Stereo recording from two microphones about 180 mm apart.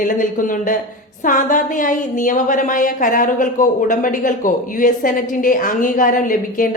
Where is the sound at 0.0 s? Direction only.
50° left (ahead or behind).